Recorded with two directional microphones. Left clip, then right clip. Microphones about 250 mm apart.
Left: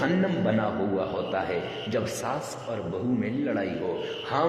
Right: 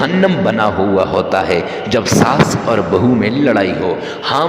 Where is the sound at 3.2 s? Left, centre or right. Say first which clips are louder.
Right 16 dB; right.